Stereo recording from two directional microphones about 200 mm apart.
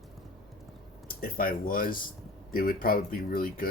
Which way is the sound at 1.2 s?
45° left (ahead or behind).